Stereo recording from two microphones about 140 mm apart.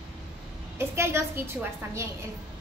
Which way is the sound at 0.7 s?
20° right (ahead or behind).